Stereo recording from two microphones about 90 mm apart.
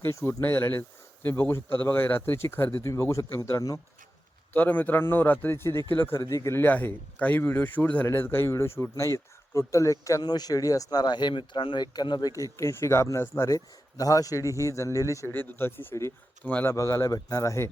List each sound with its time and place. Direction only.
0.0 s speech: 30° left (ahead or behind)
6.1 s speech: 35° left (ahead or behind)
6.7 s speech: 20° left (ahead or behind); by 12.3 s 50° left (ahead or behind)
12.4 s speech: 35° left (ahead or behind)
15.3 s speech: 25° left (ahead or behind)
16.4 s speech: 15° left (ahead or behind)
16.6 s speech: 30° left (ahead or behind)